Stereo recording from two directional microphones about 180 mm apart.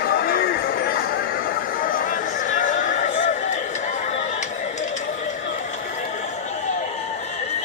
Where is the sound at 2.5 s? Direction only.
45° left (ahead or behind).